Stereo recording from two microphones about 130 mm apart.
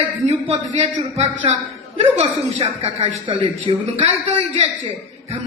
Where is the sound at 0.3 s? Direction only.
50° right (ahead or behind).